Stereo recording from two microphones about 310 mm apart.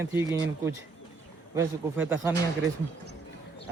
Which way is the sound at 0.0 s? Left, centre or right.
Centre.